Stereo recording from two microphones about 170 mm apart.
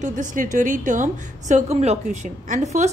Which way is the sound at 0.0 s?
50° right (ahead or behind).